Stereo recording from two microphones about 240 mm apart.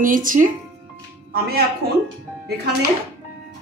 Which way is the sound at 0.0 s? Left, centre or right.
Right.